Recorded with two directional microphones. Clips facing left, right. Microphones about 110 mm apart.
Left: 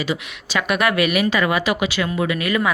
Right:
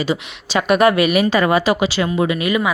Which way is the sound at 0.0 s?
30° right (ahead or behind).